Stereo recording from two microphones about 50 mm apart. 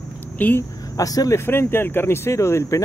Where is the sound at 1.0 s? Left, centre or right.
Left.